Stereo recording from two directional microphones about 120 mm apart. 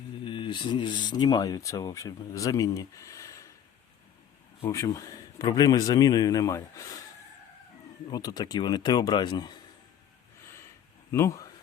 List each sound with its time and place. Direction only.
0.3 s speech: 45° left (ahead or behind); by 3.5 s 25° left (ahead or behind)
4.6 s speech: 25° left (ahead or behind)
8.1 s speech: 35° left (ahead or behind)
11.1 s speech: 25° left (ahead or behind)